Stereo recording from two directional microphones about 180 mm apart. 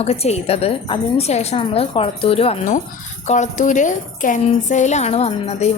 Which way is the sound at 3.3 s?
40° left (ahead or behind).